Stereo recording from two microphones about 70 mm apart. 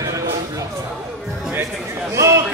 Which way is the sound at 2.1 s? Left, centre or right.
Right.